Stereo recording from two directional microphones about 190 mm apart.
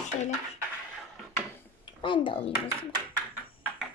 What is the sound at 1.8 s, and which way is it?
Speech, 25° left (ahead or behind).